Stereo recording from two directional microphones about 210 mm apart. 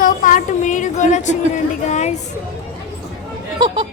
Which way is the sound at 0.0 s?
40° left (ahead or behind).